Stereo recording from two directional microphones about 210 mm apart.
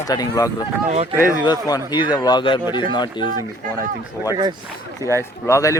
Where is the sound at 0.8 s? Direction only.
30° right (ahead or behind).